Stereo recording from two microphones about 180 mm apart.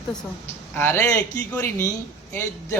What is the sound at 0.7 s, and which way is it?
A man's voice, 10° left (ahead or behind).